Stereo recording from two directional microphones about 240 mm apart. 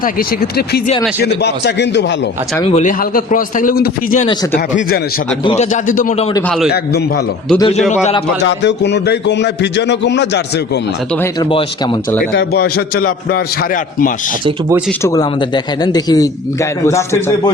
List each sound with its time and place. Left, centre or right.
0.0 s a man's voice: left
2.6 s a man's voice: left
5.5 s a man's voice: left
7.6 s a man's voice: left
8.4 s a man's voice: left
11.2 s a man's voice: centre
12.3 s a man's voice: left
15.0 s a man's voice: centre